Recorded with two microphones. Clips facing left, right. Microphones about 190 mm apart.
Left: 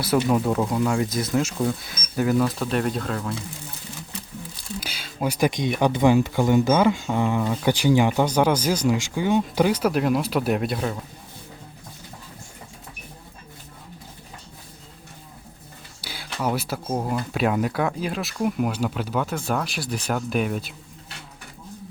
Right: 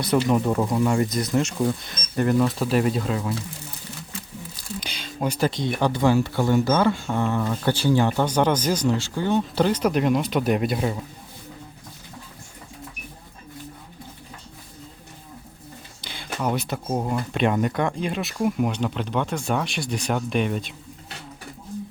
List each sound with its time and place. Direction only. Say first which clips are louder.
0.3 s speech: even; centre (ahead or behind)
4.8 s speech: even; 5° left (ahead or behind)
16.0 s speech: even; 5° left (ahead or behind)